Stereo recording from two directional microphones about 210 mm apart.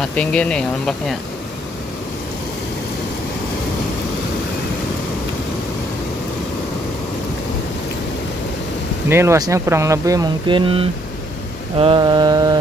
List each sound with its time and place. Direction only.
0.1 s speech: 5° left (ahead or behind)
9.1 s speech: 15° right (ahead or behind)
11.8 s mantra: 20° right (ahead or behind)